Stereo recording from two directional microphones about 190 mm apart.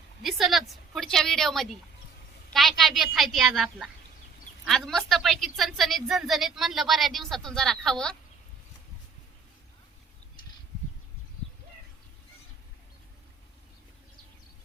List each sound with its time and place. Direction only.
0.2 s a woman's voice: centre (ahead or behind)